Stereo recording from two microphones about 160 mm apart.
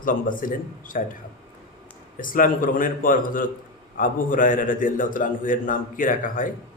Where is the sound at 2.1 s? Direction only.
60° left (ahead or behind).